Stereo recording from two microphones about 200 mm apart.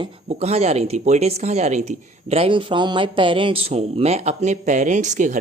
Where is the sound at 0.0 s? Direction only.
30° right (ahead or behind).